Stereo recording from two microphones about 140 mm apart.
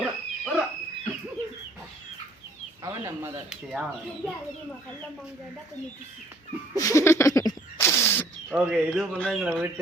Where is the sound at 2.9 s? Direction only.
20° right (ahead or behind).